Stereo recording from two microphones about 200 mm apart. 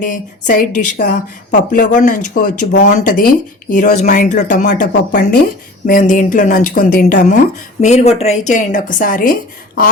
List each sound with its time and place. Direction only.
0.0 s speech: 40° left (ahead or behind)